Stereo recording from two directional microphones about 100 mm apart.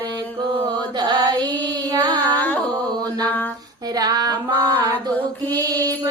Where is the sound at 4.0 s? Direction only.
40° right (ahead or behind).